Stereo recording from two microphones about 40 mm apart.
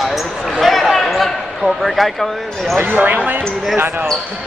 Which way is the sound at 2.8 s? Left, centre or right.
Right.